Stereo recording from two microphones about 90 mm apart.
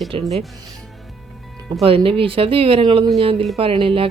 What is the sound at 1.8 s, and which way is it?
Speech, 90° right.